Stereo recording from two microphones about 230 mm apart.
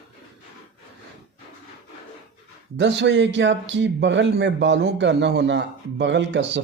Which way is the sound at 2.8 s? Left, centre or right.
Right.